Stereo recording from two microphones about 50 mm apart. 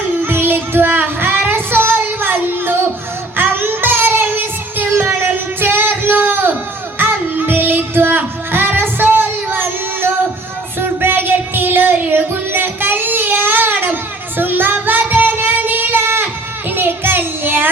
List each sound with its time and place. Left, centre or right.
0.2 s child singing: right
4.9 s child singing: right
5.2 s a sound: right
7.0 s child singing: right
8.5 s music: right